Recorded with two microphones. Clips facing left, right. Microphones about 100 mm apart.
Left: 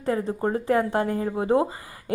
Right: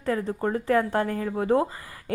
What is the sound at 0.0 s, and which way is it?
A woman's voice, 25° left (ahead or behind).